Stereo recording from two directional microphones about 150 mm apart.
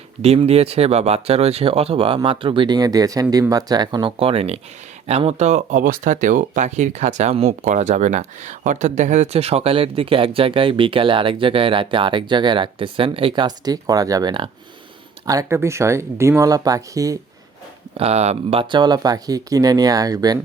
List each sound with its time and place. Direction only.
0.2 s speech: 45° right (ahead or behind); by 4.1 s 25° right (ahead or behind)
4.2 s speech: 40° right (ahead or behind); by 17.2 s 20° right (ahead or behind)
17.9 s speech: 45° right (ahead or behind)
18.7 s speech: 30° right (ahead or behind)